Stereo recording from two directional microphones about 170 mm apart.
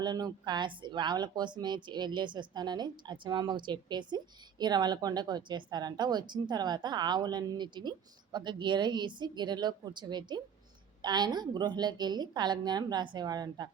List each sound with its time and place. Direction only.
0.0 s speech: 25° right (ahead or behind)